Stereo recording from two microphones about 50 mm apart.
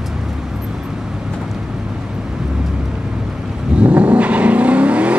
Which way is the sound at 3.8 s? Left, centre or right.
Right.